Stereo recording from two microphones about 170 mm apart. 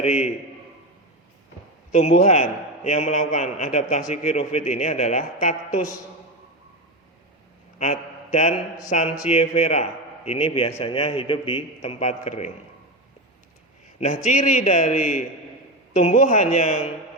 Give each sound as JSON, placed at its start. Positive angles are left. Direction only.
{"t": 0.0, "sound": "a man's voice", "side_deg": 40}
{"t": 1.9, "sound": "a man's voice", "side_deg": 40}
{"t": 7.8, "sound": "a man's voice", "side_deg": 45}
{"t": 14.0, "sound": "a man's voice", "side_deg": 45}